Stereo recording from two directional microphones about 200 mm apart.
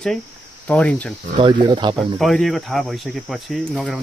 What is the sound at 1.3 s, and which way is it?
Speech, 25° right (ahead or behind).